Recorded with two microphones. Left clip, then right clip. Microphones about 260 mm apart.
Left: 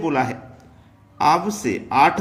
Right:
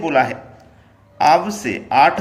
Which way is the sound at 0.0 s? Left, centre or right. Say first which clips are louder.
Right 5 dB; centre.